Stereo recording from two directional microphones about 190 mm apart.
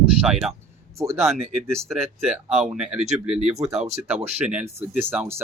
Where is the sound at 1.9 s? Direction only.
Centre (ahead or behind).